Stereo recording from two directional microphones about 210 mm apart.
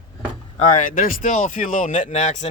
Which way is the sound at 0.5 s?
35° left (ahead or behind).